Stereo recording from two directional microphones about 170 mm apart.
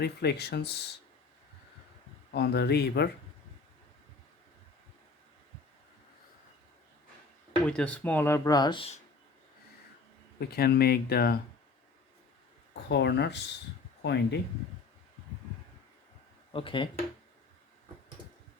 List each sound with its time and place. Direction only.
0.0 s speech: 75° left (ahead or behind)
2.3 s speech: 70° left (ahead or behind)
7.6 s speech: 5° left (ahead or behind); by 9.0 s 30° left (ahead or behind)
10.5 s speech: 65° left (ahead or behind)
12.9 s speech: 85° left
16.5 s speech: 30° left (ahead or behind)